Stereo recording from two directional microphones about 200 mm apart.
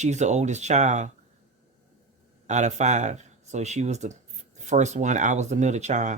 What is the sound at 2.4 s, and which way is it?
Speech, 35° right (ahead or behind).